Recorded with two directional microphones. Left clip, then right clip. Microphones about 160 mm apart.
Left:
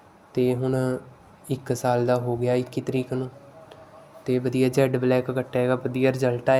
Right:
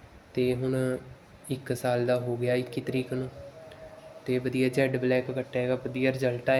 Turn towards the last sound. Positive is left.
turn(degrees=20)  # may be behind; listen again after turning